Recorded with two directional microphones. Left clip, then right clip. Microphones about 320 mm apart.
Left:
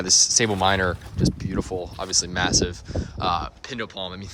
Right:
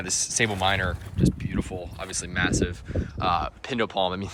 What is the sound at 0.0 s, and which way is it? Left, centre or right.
Speech, centre.